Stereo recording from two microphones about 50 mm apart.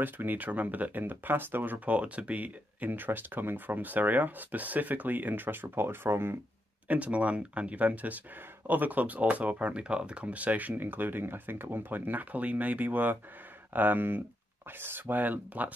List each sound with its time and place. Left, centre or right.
0.0 s speech: right
6.9 s speech: right